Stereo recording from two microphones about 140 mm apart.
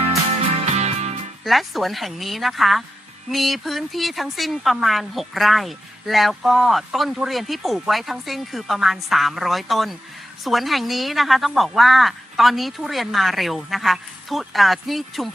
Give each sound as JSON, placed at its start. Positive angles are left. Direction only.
{"t": 0.5, "sound": "music", "side_deg": -50}
{"t": 1.5, "sound": "speech", "side_deg": 0}